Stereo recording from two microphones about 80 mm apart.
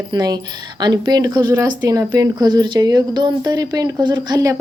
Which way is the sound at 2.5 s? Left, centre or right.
Right.